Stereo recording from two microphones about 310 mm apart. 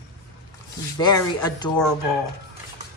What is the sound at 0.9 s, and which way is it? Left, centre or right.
Speech, centre.